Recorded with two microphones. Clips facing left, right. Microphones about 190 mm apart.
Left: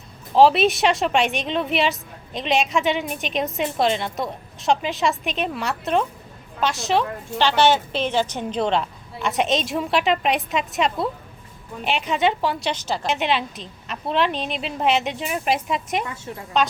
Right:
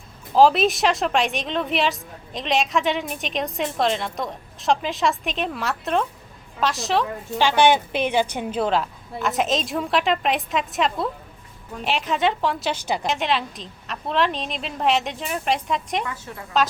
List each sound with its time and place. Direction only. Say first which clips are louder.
0.3 s a woman's voice: left 1 dB; centre (ahead or behind)
7.3 s a woman's voice: right 1 dB; 10° right (ahead or behind)
12.8 s a woman's voice: right 1 dB; 15° right (ahead or behind)
13.1 s a woman's voice: left 3 dB; centre (ahead or behind)
16.0 s a woman's voice: left 1 dB; 25° left (ahead or behind)